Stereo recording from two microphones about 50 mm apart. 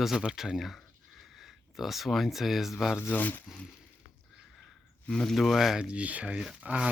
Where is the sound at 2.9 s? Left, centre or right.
Left.